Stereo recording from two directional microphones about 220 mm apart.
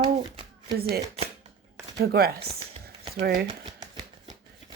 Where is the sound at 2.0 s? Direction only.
45° right (ahead or behind).